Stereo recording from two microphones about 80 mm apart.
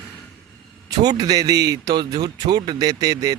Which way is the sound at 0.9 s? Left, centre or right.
Right.